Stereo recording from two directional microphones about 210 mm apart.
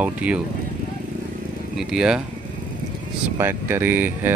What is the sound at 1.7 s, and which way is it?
Speech, 5° right (ahead or behind).